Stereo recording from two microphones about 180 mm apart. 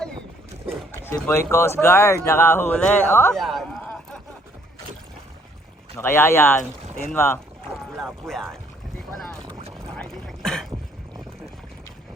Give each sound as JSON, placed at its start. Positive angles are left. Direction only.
{"t": 0.9, "sound": "speech", "side_deg": 15}
{"t": 3.3, "sound": "speech", "side_deg": 0}
{"t": 6.0, "sound": "speech", "side_deg": 15}
{"t": 7.7, "sound": "music", "side_deg": 0}
{"t": 9.7, "sound": "a sound", "side_deg": 0}